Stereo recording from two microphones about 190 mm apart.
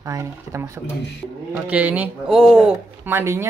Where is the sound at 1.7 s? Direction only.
10° right (ahead or behind).